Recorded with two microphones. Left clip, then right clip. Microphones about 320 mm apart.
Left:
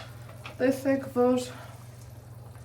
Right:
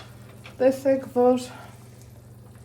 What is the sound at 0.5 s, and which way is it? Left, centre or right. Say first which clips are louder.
Speech: right 6 dB; centre.